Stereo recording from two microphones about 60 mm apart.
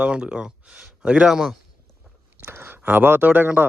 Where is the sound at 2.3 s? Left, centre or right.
Right.